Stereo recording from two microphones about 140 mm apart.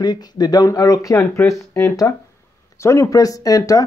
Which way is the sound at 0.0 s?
30° left (ahead or behind).